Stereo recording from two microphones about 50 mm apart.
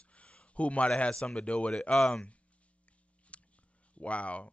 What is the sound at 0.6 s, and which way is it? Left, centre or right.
A woman's voice, left.